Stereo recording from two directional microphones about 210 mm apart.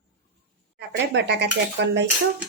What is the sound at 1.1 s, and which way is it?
Cutlery, 55° right (ahead or behind).